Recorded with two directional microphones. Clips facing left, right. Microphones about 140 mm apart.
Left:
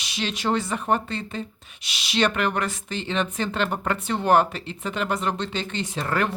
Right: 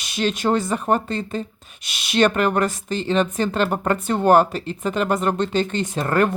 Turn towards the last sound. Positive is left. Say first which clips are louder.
# right 6 dB
turn(degrees=-45)  # may be behind; listen again after turning